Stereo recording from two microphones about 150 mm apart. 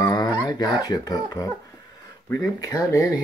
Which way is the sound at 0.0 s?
25° left (ahead or behind).